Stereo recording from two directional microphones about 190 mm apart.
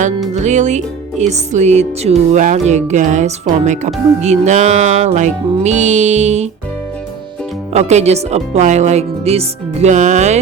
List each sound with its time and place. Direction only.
0.3 s music: 40° right (ahead or behind)
7.7 s music: 35° right (ahead or behind)